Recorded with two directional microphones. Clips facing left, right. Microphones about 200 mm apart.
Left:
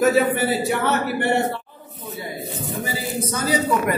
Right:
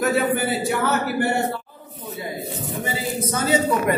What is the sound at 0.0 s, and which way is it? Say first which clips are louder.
Speech: left 3 dB; centre (ahead or behind).